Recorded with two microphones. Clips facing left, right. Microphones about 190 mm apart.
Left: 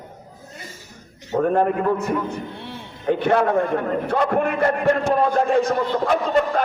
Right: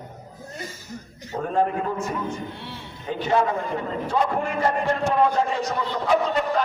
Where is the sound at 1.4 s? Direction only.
55° left (ahead or behind).